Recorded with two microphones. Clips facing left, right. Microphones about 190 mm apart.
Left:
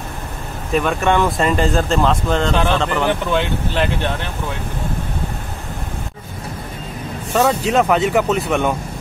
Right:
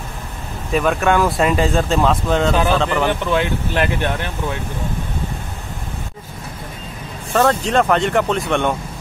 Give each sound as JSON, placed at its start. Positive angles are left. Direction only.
{"t": 0.7, "sound": "speech", "side_deg": 0}
{"t": 7.3, "sound": "speech", "side_deg": 5}